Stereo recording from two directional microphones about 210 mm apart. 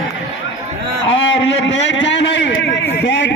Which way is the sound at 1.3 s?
60° left (ahead or behind).